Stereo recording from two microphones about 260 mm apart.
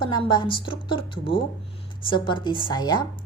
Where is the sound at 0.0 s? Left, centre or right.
Centre.